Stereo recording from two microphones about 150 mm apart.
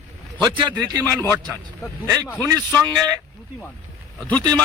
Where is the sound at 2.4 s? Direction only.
20° right (ahead or behind).